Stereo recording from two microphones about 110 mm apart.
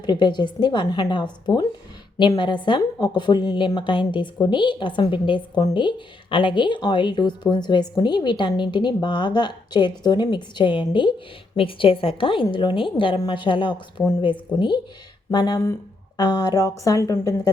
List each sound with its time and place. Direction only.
0.0 s a woman's voice: 45° left (ahead or behind)